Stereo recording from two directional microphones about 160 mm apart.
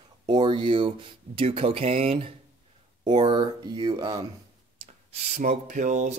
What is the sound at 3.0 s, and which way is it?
Speech, 30° right (ahead or behind).